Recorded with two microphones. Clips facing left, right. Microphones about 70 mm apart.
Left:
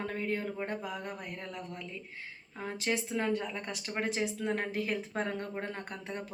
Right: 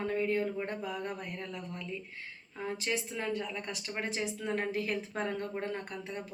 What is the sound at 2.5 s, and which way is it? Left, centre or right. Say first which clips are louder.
Speech: left 1 dB; left.